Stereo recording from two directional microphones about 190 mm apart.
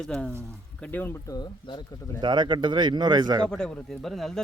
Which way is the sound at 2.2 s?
25° right (ahead or behind).